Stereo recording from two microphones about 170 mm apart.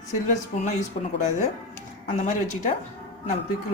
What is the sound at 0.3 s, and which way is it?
Speech, 45° left (ahead or behind).